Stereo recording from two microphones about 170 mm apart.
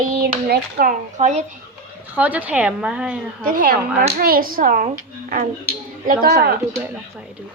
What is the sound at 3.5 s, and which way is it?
Speech, 55° right (ahead or behind).